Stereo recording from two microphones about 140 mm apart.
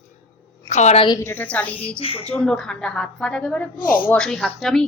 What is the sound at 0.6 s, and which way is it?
Speech, 55° left (ahead or behind).